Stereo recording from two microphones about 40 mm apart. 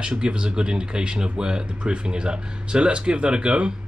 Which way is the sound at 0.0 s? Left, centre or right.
Right.